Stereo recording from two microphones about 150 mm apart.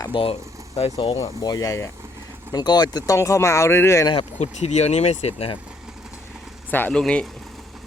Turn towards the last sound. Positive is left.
turn(degrees=5)  # may be behind; listen again after turning